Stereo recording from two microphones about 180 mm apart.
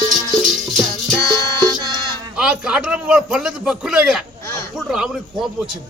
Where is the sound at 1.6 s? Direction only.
20° right (ahead or behind).